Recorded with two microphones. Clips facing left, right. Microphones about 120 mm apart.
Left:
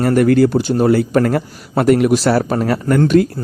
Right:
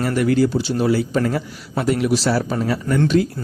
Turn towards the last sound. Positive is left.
turn(degrees=55)  # may be behind; listen again after turning